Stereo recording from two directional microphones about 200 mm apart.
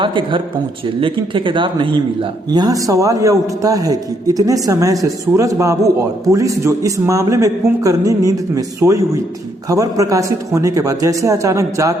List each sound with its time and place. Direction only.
0.0 s a man's voice: 25° right (ahead or behind)